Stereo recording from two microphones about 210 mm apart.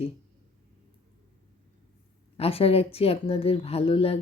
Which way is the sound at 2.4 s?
30° left (ahead or behind).